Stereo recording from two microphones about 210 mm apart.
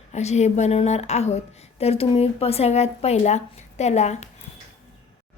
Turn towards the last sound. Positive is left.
turn(degrees=30)  # may be behind; listen again after turning